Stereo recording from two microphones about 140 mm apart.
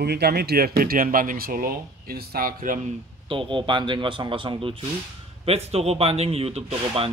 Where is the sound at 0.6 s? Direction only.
90° right.